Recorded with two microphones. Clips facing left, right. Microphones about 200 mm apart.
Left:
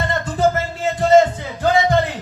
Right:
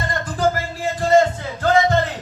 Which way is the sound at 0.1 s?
25° left (ahead or behind).